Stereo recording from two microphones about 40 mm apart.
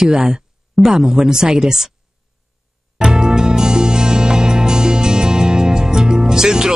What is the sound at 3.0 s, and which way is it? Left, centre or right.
Music, centre.